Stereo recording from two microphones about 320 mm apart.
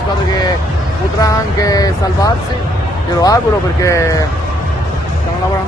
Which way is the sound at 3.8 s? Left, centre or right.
Centre.